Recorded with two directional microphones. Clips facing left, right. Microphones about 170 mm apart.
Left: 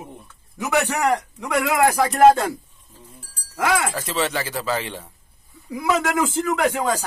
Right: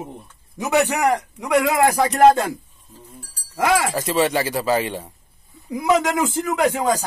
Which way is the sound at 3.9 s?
10° right (ahead or behind).